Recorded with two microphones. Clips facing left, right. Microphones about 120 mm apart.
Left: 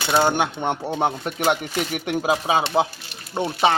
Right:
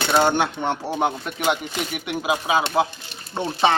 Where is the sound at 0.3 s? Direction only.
15° left (ahead or behind).